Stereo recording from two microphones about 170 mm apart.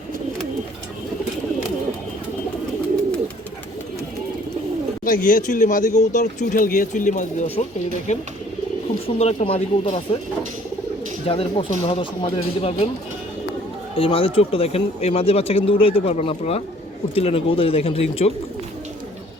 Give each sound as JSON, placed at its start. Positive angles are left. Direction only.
{"t": 5.0, "sound": "speech", "side_deg": 55}
{"t": 9.0, "sound": "speech", "side_deg": 35}
{"t": 11.3, "sound": "speech", "side_deg": 35}
{"t": 13.9, "sound": "speech", "side_deg": 30}